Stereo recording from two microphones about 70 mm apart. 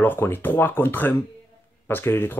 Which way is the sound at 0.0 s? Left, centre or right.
Left.